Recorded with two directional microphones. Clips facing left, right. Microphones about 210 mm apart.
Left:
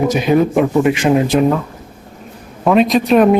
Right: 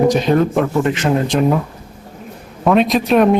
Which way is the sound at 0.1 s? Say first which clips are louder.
Left 1 dB; 10° left (ahead or behind).